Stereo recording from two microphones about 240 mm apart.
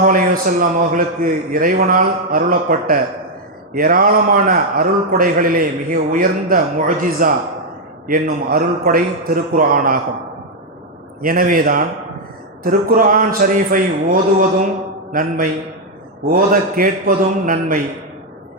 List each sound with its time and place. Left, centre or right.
0.0 s a man's voice: right
11.2 s a man's voice: right